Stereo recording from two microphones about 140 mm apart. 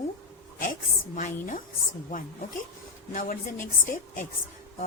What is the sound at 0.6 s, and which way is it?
A woman's voice, 70° left (ahead or behind).